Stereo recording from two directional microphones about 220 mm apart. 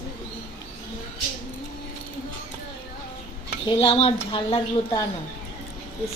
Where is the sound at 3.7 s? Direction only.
25° left (ahead or behind).